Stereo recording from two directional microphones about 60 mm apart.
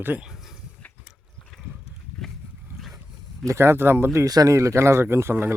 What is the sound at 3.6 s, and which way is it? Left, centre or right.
Speech, right.